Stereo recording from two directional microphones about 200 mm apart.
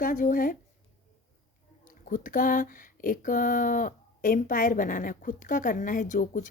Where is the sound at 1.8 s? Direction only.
40° left (ahead or behind).